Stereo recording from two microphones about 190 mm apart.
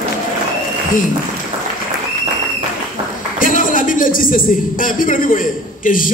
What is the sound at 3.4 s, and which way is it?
A man's voice, 45° left (ahead or behind).